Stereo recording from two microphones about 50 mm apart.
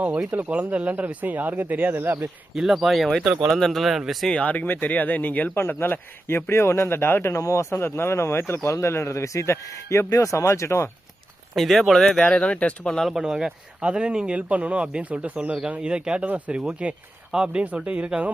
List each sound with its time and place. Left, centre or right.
0.3 s speech: right
0.5 s speech: right
2.6 s speech: centre
4.3 s speech: left
5.5 s speech: left
11.5 s speech: centre
12.2 s speech: left
13.0 s speech: centre
17.6 s speech: right